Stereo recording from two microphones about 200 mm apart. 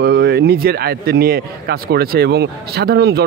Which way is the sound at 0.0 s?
55° right (ahead or behind).